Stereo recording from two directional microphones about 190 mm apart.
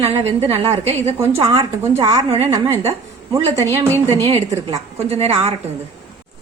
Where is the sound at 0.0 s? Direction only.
30° right (ahead or behind).